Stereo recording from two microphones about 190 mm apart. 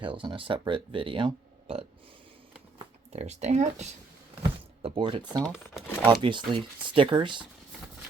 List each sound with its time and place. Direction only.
0.0 s speech: 25° right (ahead or behind)